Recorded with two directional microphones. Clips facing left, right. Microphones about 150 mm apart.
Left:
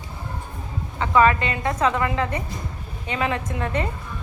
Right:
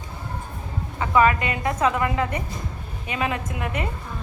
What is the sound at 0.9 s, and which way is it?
A woman's voice, 15° right (ahead or behind).